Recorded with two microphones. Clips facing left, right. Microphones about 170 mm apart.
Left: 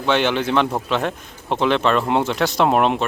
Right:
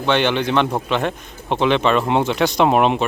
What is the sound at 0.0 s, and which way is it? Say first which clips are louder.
Speech: right 1 dB; 5° left (ahead or behind).